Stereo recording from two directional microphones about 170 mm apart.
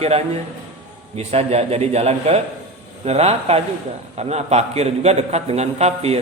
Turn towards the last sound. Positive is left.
turn(degrees=-40)  # may be behind; listen again after turning